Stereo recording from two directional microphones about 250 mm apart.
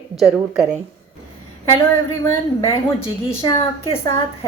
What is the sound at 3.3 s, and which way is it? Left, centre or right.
Speech, left.